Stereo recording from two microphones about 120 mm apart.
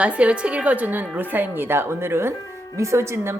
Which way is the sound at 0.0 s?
10° right (ahead or behind).